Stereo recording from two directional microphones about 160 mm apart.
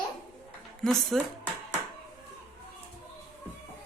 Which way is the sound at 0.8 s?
5° left (ahead or behind).